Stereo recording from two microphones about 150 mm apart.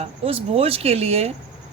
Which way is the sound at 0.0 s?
40° right (ahead or behind).